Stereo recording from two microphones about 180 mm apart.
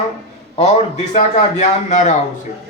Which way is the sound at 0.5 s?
40° left (ahead or behind).